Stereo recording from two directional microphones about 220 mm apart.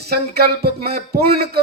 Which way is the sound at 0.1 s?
45° right (ahead or behind).